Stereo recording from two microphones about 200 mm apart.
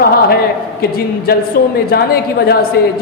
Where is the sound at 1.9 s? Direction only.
50° left (ahead or behind).